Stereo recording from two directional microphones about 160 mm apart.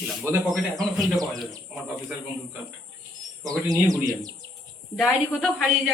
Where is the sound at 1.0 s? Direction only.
Centre (ahead or behind).